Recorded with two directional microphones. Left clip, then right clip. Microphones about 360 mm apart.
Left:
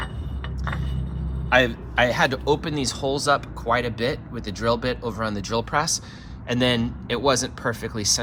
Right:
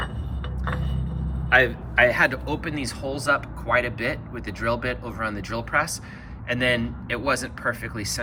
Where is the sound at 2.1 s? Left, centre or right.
Centre.